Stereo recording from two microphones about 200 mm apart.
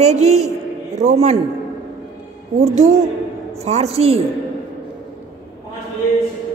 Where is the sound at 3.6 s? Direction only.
30° right (ahead or behind).